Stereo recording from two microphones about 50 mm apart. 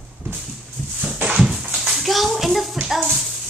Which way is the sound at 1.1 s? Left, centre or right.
Right.